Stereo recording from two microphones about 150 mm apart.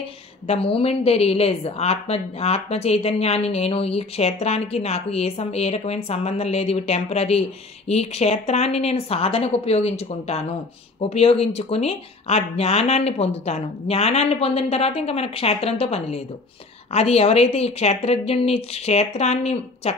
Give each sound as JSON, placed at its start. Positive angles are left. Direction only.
{"t": 0.5, "sound": "a woman's voice", "side_deg": 40}